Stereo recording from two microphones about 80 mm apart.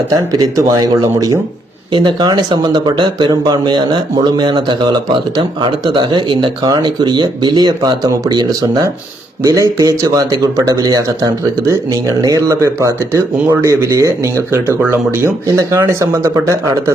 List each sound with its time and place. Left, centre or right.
0.1 s speech: right
1.9 s speech: right
3.4 s speech: right
9.4 s speech: right
15.4 s speech: right